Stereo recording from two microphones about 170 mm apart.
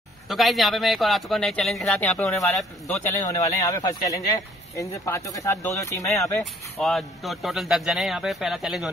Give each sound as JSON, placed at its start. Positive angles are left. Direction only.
{"t": 0.3, "sound": "speech", "side_deg": 0}
{"t": 2.9, "sound": "speech", "side_deg": 20}
{"t": 6.4, "sound": "speech", "side_deg": 0}